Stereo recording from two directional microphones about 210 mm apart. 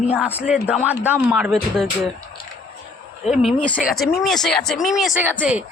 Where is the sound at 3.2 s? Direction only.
Centre (ahead or behind).